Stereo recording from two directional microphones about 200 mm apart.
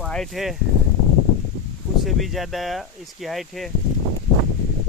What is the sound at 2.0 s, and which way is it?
Speech, centre (ahead or behind).